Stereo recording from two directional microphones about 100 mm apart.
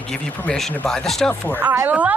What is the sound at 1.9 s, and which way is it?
Speech, 15° right (ahead or behind).